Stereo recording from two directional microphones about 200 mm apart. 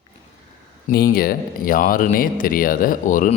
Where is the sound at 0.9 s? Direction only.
50° left (ahead or behind).